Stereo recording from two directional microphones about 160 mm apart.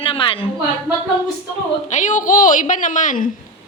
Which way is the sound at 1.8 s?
50° left (ahead or behind).